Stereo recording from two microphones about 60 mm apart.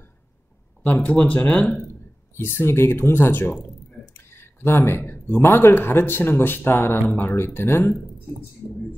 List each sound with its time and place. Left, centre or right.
1.0 s speech: left
2.3 s speech: left